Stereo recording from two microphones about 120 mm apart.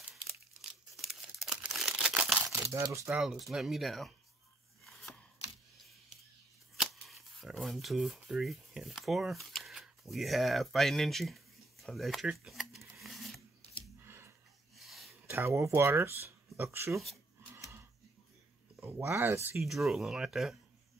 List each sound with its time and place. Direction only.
0.1 s crumpling: centre (ahead or behind)
2.4 s crumpling: 25° right (ahead or behind)
3.2 s speech: centre (ahead or behind)
6.8 s speech: centre (ahead or behind)
13.0 s sewing machine: centre (ahead or behind)
14.0 s a sound: 20° right (ahead or behind)
14.8 s a sound: centre (ahead or behind)
15.2 s speech: 20° right (ahead or behind)
18.8 s speech: 20° right (ahead or behind)
19.6 s speech: centre (ahead or behind)